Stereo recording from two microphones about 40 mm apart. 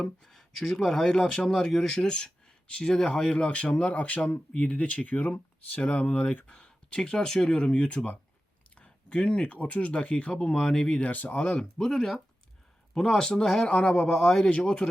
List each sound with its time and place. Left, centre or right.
0.0 s speech: centre; by 6.4 s left
6.5 s speech: left
8.7 s a sound: left
9.5 s speech: left
10.3 s speech: centre
11.0 s speech: left
11.8 s speech: centre
13.6 s speech: left